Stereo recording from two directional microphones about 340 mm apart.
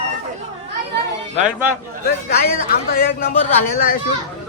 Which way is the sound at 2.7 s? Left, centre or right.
Left.